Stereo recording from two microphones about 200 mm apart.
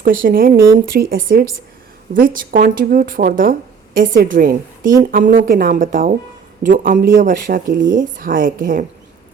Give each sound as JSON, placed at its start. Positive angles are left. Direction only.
{"t": 0.0, "sound": "speech", "side_deg": -45}